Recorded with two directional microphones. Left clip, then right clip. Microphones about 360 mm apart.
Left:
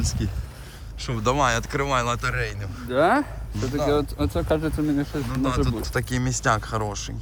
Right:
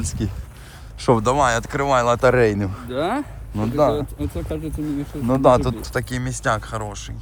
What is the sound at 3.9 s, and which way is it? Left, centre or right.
Speech, centre.